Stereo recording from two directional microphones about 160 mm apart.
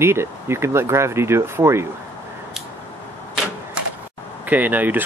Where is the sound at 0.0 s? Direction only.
15° right (ahead or behind).